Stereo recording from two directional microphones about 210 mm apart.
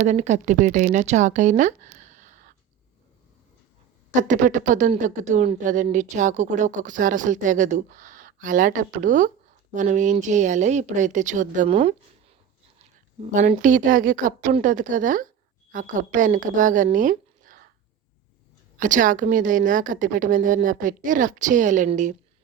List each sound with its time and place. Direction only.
0.0 s speech: 35° right (ahead or behind)
4.2 s speech: 35° right (ahead or behind)
13.3 s a woman's voice: 35° right (ahead or behind)
18.8 s speech: 40° right (ahead or behind)